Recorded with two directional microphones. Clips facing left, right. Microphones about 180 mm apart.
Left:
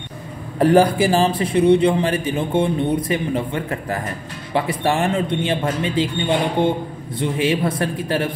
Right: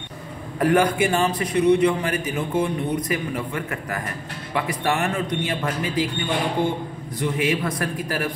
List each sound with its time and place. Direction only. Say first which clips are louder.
0.6 s a man's voice: left 5 dB; 30° left (ahead or behind)